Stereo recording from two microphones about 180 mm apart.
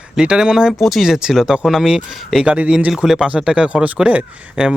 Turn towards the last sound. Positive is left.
turn(degrees=-5)  # may be behind; listen again after turning